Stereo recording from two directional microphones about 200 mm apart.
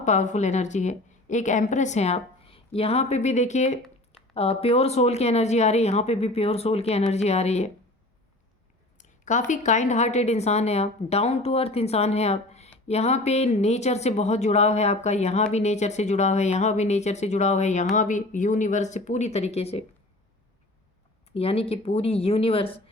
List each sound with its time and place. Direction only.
0.0 s a woman's voice: 35° left (ahead or behind)
9.0 s a woman's voice: 40° left (ahead or behind)
21.3 s speech: 30° left (ahead or behind)